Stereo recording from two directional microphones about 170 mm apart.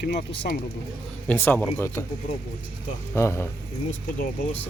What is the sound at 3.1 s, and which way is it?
Speech, 15° left (ahead or behind).